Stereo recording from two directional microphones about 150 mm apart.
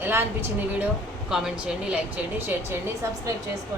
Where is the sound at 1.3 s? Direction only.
5° right (ahead or behind).